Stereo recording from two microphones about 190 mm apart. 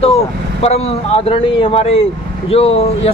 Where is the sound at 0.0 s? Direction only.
35° left (ahead or behind).